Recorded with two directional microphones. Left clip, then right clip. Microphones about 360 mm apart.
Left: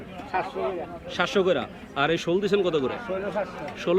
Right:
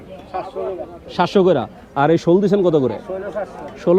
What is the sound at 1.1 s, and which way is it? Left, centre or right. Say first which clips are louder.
A man's voice: right 8 dB; right.